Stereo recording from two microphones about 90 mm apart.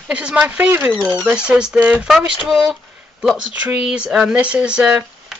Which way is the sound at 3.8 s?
5° right (ahead or behind).